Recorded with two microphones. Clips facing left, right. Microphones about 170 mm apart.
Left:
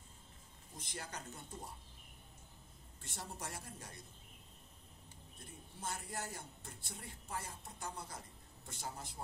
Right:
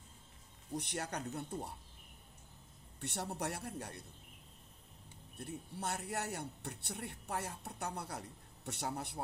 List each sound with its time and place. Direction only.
0.7 s speech: 70° right (ahead or behind)
3.0 s speech: 70° right (ahead or behind)
5.4 s speech: 70° right (ahead or behind)